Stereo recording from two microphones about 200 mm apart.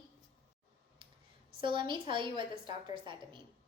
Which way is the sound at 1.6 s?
25° right (ahead or behind).